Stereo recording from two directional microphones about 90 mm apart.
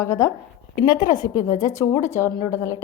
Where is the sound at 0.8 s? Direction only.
50° left (ahead or behind).